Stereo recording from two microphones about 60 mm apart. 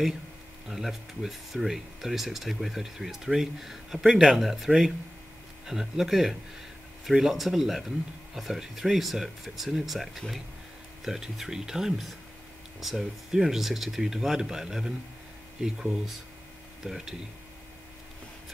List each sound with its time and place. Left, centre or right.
0.7 s speech: centre